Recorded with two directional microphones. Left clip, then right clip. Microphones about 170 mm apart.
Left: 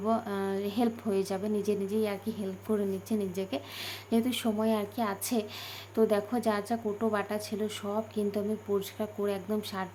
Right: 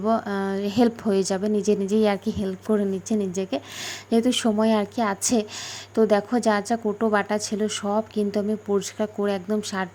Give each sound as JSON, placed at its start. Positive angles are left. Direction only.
{"t": 0.0, "sound": "a woman's voice", "side_deg": -35}